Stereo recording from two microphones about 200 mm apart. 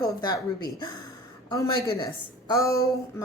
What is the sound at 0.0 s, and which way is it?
Speech, 20° left (ahead or behind).